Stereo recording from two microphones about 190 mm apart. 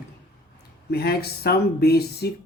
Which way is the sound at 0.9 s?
55° left (ahead or behind).